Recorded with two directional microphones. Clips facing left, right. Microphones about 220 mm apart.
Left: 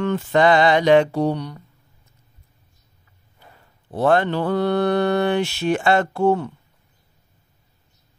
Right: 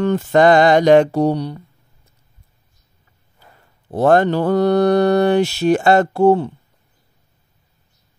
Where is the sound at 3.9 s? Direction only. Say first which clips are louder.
Right 4 dB; 45° right (ahead or behind).